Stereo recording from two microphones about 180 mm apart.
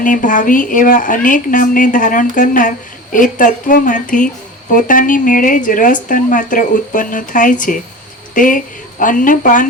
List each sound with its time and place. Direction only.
0.0 s a woman's voice: 45° left (ahead or behind)